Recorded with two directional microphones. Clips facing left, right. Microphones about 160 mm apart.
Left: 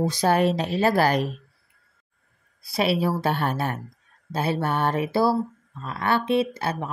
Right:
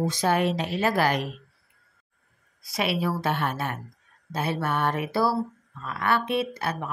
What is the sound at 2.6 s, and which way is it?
Speech, 30° left (ahead or behind).